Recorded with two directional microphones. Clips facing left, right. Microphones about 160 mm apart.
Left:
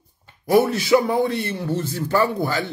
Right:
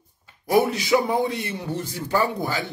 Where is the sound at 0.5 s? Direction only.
15° right (ahead or behind).